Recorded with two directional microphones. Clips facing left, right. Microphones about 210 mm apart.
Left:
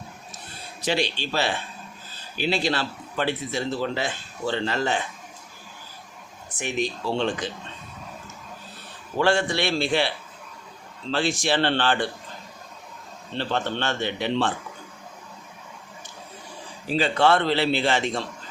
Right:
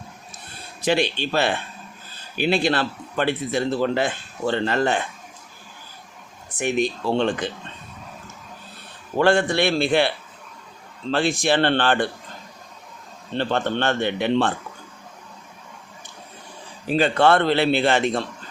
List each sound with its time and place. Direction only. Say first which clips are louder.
0.8 s a man's voice: right 4 dB; 55° right (ahead or behind)
6.6 s a man's voice: right 5 dB; 55° right (ahead or behind)
9.1 s a man's voice: right 4 dB; 55° right (ahead or behind)
11.1 s a man's voice: right 3 dB; 55° right (ahead or behind)
13.3 s a man's voice: right 4 dB; 55° right (ahead or behind)
16.8 s a man's voice: right 3 dB; 55° right (ahead or behind)